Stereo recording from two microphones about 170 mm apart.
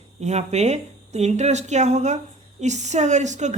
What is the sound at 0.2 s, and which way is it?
Speech, 40° right (ahead or behind).